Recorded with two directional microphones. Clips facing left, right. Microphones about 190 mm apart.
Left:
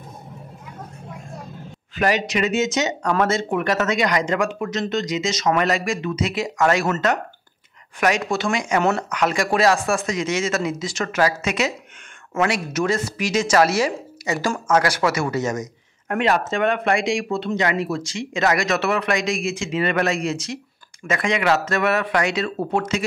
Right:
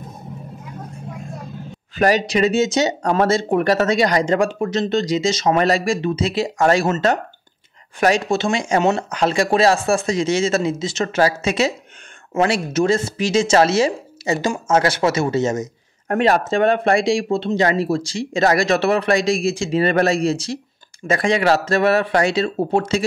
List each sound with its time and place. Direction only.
2.0 s a man's voice: 35° right (ahead or behind)